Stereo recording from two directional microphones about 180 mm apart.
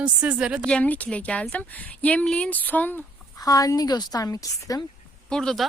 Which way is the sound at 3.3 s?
20° left (ahead or behind).